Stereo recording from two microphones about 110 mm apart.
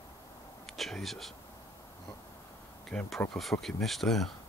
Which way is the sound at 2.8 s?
5° left (ahead or behind).